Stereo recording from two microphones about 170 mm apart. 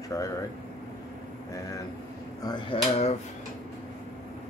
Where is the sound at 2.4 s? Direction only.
30° left (ahead or behind).